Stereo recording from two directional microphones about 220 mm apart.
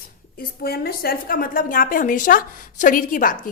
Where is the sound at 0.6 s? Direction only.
45° left (ahead or behind).